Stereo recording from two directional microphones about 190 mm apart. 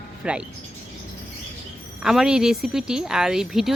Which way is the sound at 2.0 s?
5° right (ahead or behind).